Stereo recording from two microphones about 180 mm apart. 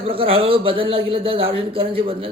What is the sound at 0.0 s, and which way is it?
Speech, 30° right (ahead or behind).